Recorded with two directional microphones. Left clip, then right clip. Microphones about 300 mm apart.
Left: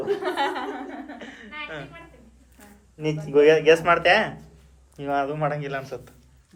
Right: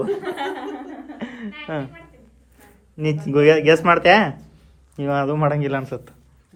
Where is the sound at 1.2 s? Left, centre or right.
Right.